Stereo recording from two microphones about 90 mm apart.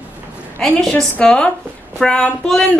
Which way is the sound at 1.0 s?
10° left (ahead or behind).